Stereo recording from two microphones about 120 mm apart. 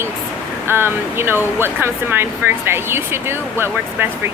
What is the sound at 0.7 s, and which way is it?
Speech, 20° right (ahead or behind).